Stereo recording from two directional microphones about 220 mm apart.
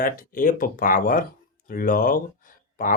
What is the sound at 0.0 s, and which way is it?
Speech, 40° left (ahead or behind).